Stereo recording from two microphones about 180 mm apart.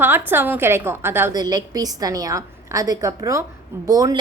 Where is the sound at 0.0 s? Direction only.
10° right (ahead or behind).